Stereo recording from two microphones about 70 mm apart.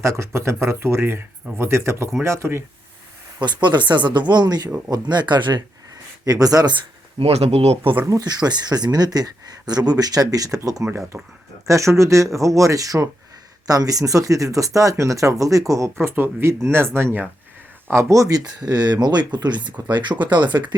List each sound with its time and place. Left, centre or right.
0.0 s speech: right
3.4 s speech: right
4.3 s speech: right
4.9 s speech: right
6.2 s speech: right
7.2 s speech: right
8.2 s speech: right
16.0 s speech: right
18.1 s speech: right